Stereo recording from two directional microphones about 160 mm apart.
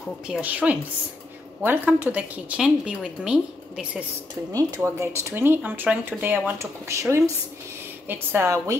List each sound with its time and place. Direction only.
0.3 s speech: 10° right (ahead or behind)
4.5 s speech: 20° right (ahead or behind)